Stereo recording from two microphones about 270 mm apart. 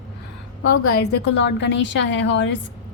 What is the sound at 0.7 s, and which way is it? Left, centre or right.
Speech, left.